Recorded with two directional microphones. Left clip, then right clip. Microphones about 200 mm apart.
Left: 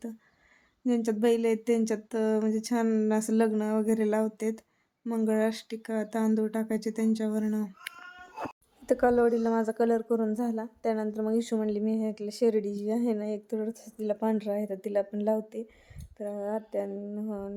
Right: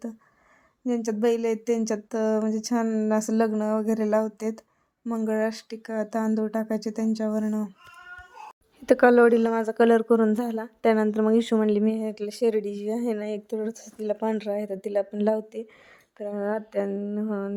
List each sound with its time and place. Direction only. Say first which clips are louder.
0.9 s speech: right 2 dB; 15° right (ahead or behind)
8.9 s a woman's voice: right 7 dB; 30° right (ahead or behind)